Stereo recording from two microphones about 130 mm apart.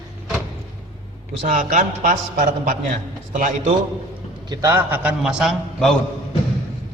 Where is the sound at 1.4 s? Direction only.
90° right.